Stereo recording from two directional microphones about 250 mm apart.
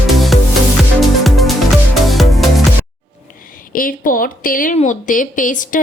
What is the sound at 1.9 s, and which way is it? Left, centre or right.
Music, centre.